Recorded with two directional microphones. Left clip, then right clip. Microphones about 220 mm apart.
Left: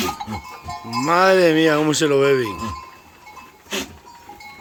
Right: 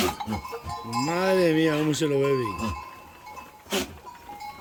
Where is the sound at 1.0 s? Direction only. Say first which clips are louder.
Left 9 dB; 5° right (ahead or behind).